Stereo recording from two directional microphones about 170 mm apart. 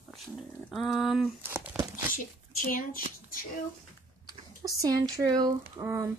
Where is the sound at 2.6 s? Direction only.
55° left (ahead or behind).